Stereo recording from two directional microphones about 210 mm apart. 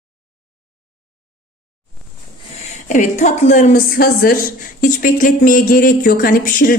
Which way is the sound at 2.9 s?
35° left (ahead or behind).